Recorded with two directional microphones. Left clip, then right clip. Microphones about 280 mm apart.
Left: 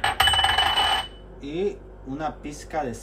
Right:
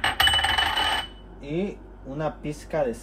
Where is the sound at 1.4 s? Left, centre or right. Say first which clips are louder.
Left 3 dB; right.